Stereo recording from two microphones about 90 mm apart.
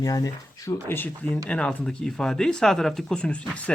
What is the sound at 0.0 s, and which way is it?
Speech, 40° left (ahead or behind).